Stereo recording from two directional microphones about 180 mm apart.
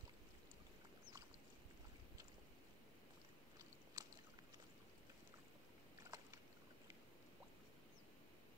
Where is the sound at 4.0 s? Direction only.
20° right (ahead or behind).